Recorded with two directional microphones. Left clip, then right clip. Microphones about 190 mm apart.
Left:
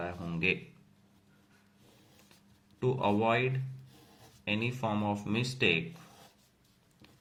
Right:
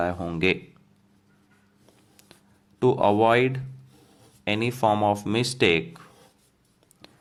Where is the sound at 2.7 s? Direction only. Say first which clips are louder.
Right 10 dB; 45° right (ahead or behind).